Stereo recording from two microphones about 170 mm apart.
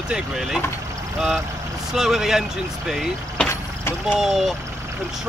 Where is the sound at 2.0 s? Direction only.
Centre (ahead or behind).